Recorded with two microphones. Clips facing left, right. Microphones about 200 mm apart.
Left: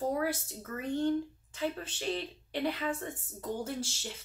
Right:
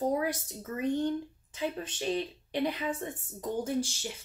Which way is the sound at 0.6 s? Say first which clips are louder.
Right 5 dB; 20° right (ahead or behind).